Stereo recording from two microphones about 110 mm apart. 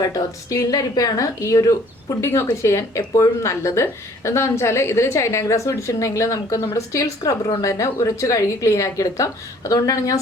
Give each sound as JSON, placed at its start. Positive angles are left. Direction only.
{"t": 0.0, "sound": "a woman's voice", "side_deg": 30}